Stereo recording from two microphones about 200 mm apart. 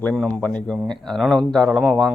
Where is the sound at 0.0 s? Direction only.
5° left (ahead or behind).